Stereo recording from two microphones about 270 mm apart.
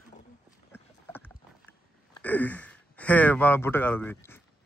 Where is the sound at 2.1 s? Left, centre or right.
Centre.